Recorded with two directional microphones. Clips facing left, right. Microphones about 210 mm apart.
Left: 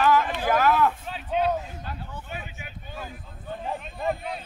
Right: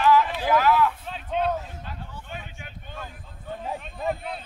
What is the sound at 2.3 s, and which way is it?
Boat, 5° left (ahead or behind).